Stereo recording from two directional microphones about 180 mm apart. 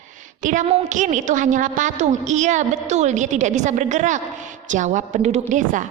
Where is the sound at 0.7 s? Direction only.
45° right (ahead or behind).